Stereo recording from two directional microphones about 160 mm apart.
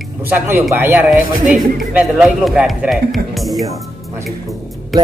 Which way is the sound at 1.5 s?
5° right (ahead or behind).